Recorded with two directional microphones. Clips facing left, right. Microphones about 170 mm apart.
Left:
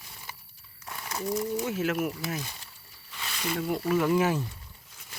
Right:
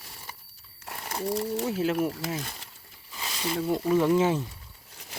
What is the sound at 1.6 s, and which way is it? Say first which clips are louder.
Speech: right 2 dB; 30° right (ahead or behind).